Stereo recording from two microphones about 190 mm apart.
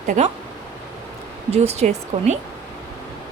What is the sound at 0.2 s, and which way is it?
Speech, 35° right (ahead or behind).